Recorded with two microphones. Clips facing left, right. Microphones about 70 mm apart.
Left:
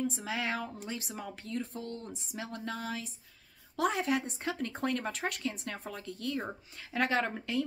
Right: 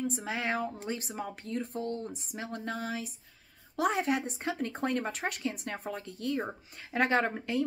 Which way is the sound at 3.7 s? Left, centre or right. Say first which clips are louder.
Right 1 dB; centre.